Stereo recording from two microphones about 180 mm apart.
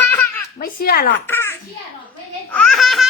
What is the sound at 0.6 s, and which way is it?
Speech, 55° left (ahead or behind).